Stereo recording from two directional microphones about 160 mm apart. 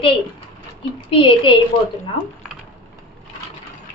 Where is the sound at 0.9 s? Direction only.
35° left (ahead or behind).